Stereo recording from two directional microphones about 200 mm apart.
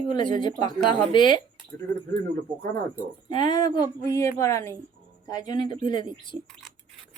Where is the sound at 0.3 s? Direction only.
25° left (ahead or behind).